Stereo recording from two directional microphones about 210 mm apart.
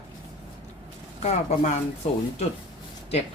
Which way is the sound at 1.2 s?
30° left (ahead or behind).